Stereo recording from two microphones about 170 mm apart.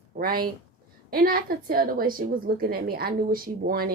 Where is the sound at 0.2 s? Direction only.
60° right (ahead or behind).